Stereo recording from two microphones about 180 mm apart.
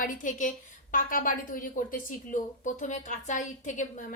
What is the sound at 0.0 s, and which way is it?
Speech, 50° left (ahead or behind).